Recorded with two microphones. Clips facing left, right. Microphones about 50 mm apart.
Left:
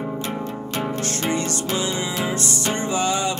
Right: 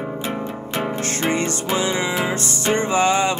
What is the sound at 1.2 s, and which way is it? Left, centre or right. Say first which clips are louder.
Music: right 3 dB; right.